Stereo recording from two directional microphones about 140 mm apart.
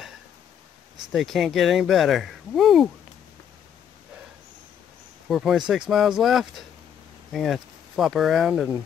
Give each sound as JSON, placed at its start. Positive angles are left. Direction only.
{"t": 1.1, "sound": "speech", "side_deg": 0}
{"t": 5.3, "sound": "speech", "side_deg": 0}